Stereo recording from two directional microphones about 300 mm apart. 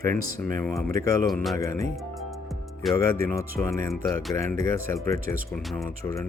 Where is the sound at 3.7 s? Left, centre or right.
Centre.